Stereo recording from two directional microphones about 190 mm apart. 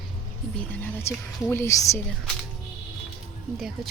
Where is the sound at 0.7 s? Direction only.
10° left (ahead or behind).